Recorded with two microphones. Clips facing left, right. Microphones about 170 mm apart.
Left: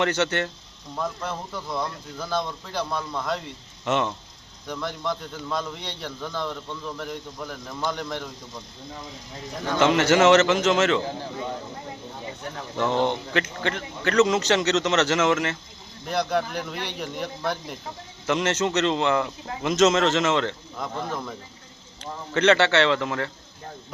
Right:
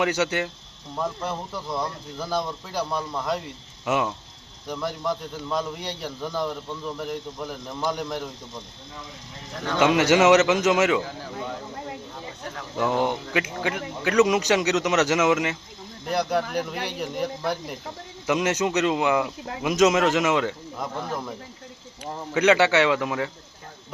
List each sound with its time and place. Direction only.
0.0 s a man's voice: 10° right (ahead or behind)
9.7 s a man's voice: 15° right (ahead or behind)
12.7 s a man's voice: 10° right (ahead or behind)